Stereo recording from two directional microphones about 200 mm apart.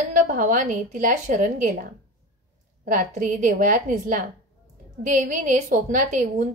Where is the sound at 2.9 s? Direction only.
40° right (ahead or behind).